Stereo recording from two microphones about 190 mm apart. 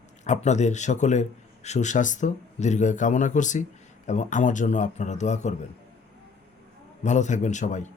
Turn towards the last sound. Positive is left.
turn(degrees=40)  # may be behind; listen again after turning